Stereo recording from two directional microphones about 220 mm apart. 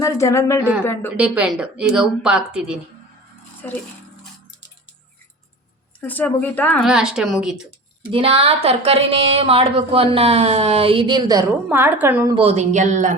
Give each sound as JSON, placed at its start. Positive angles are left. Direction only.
{"t": 0.0, "sound": "speech", "side_deg": 15}
{"t": 1.1, "sound": "speech", "side_deg": -5}
{"t": 3.6, "sound": "speech", "side_deg": 10}
{"t": 6.0, "sound": "speech", "side_deg": 5}
{"t": 8.1, "sound": "speech", "side_deg": -25}
{"t": 12.3, "sound": "a woman's voice", "side_deg": -25}